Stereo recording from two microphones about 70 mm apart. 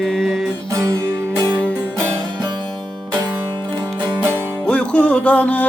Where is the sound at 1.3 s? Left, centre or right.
Right.